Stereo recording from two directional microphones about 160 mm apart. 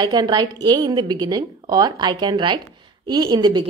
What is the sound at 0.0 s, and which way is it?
A woman's voice, 25° right (ahead or behind).